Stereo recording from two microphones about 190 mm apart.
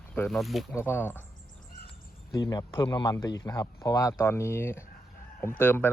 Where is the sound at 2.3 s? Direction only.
20° left (ahead or behind).